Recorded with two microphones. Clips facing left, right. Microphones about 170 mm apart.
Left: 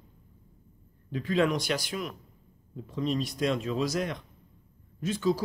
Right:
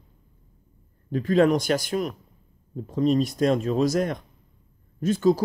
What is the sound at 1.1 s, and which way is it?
Speech, 45° right (ahead or behind).